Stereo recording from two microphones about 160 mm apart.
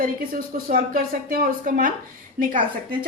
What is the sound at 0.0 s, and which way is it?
A woman's voice, 60° right (ahead or behind).